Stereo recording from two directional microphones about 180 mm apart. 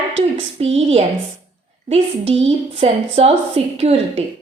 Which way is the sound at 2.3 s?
30° right (ahead or behind).